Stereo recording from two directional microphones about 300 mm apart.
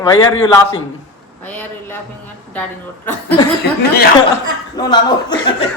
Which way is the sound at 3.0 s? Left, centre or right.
Centre.